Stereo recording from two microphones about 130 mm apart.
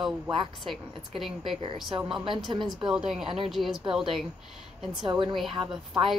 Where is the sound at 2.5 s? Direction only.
40° right (ahead or behind).